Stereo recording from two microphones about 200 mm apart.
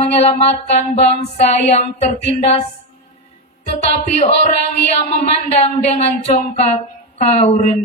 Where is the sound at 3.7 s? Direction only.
35° left (ahead or behind).